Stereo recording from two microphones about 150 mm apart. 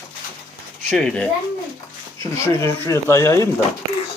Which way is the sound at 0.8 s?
5° left (ahead or behind).